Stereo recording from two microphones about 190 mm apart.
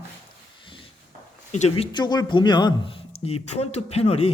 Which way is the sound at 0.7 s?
25° left (ahead or behind).